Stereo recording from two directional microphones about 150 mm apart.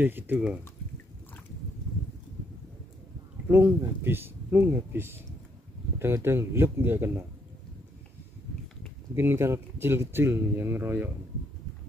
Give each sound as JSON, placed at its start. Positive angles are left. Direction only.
{"t": 0.0, "sound": "speech", "side_deg": -10}
{"t": 3.4, "sound": "speech", "side_deg": -15}
{"t": 9.1, "sound": "speech", "side_deg": -15}